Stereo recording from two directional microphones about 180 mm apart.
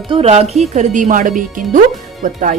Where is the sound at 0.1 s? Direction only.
35° right (ahead or behind).